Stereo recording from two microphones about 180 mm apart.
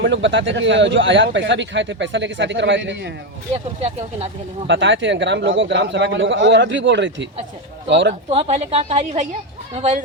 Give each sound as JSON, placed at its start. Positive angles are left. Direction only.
{"t": 0.0, "sound": "speech", "side_deg": -85}
{"t": 4.7, "sound": "speech", "side_deg": -90}
{"t": 8.3, "sound": "a woman's voice", "side_deg": -35}